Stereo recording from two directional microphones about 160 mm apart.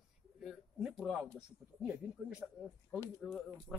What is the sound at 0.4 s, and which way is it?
Speech, 5° right (ahead or behind).